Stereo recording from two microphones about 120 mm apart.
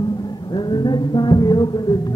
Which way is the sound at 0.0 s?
35° left (ahead or behind).